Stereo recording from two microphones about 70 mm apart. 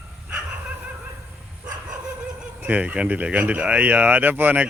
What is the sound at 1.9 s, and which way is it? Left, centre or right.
Dog, centre.